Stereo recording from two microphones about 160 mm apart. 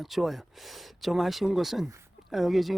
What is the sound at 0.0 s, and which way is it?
Speech, centre (ahead or behind).